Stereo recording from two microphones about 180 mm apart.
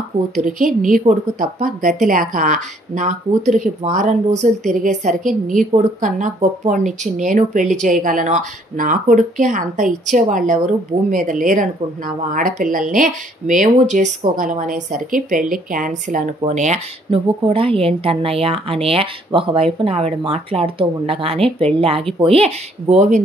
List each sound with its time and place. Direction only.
0.4 s speech: 45° right (ahead or behind)